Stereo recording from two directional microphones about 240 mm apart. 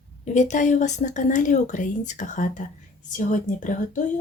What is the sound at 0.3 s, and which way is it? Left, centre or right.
A woman's voice, left.